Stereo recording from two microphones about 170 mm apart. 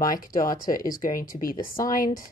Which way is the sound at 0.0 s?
55° left (ahead or behind).